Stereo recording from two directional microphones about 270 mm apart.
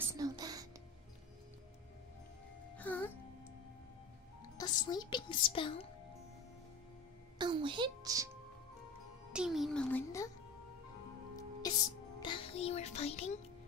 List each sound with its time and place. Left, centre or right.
0.1 s music: centre
2.8 s music: centre
4.6 s speech: centre
7.3 s a woman's voice: centre
9.3 s a child's voice: centre
11.6 s music: centre